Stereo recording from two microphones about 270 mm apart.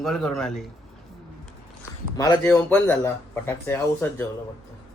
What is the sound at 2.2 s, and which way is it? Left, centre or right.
A man's voice, centre.